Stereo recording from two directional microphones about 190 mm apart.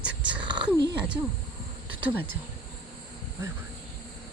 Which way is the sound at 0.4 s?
25° right (ahead or behind).